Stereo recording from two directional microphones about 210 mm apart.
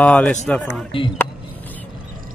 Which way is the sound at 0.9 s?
25° left (ahead or behind).